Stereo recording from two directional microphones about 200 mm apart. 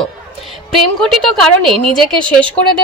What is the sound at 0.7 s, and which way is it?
Speech, 5° left (ahead or behind).